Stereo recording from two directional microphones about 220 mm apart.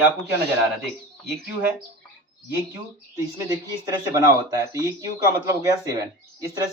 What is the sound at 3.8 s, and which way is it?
Speech, 15° right (ahead or behind).